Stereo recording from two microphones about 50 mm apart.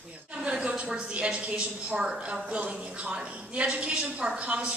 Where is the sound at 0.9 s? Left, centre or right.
Centre.